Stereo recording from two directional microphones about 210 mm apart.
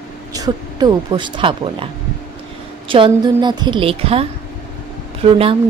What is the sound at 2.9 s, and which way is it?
Speech, 25° right (ahead or behind).